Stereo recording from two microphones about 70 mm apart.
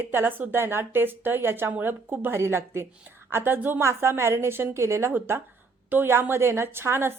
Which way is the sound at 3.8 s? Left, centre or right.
Right.